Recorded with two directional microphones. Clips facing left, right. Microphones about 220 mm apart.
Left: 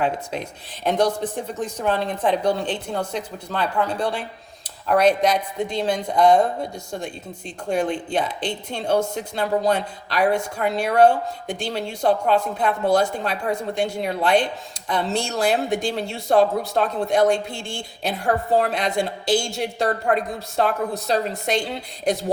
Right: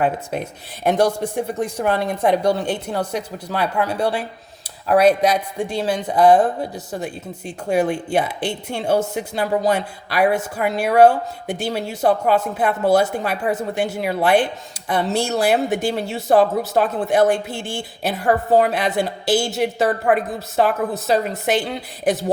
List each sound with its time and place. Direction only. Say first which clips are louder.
0.0 s speech: right 3 dB; 55° right (ahead or behind)
0.9 s a man's voice: right 3 dB; 10° right (ahead or behind)